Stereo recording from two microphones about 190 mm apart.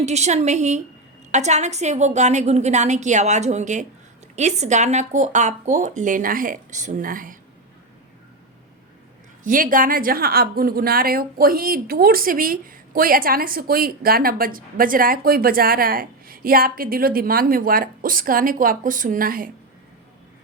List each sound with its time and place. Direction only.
0.0 s speech: 35° right (ahead or behind)
9.4 s a woman's voice: 45° right (ahead or behind)